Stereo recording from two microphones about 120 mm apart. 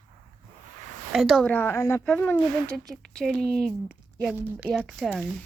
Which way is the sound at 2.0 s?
15° left (ahead or behind).